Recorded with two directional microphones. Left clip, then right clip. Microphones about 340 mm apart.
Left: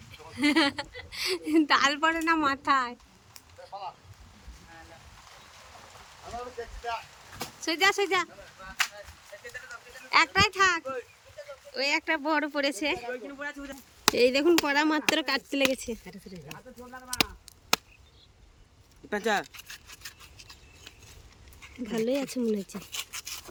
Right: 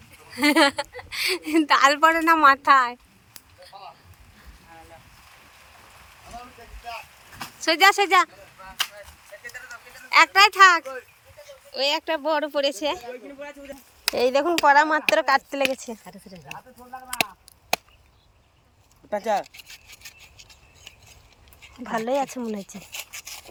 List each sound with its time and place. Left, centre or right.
0.3 s a woman's voice: centre
7.6 s a woman's voice: centre
10.1 s a woman's voice: centre
19.1 s speech: centre
21.8 s speech: centre